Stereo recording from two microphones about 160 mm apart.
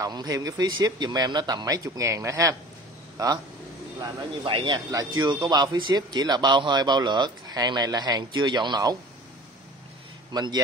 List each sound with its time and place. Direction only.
0.0 s speech: 25° right (ahead or behind)
4.5 s speech: 30° right (ahead or behind)
10.3 s speech: 25° right (ahead or behind)